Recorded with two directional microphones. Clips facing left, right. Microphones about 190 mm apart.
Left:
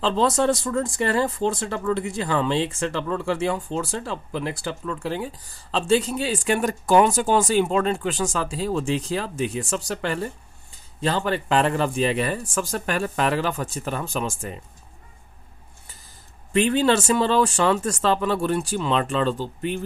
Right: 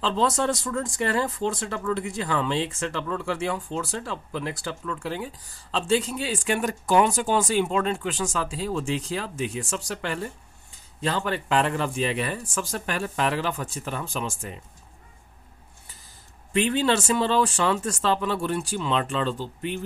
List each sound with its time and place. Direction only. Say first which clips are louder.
0.0 s speech: left 4 dB; 35° left (ahead or behind)
16.5 s speech: left 3 dB; 40° left (ahead or behind)